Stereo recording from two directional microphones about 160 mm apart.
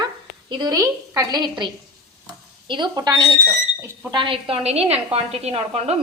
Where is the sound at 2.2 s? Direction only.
30° right (ahead or behind).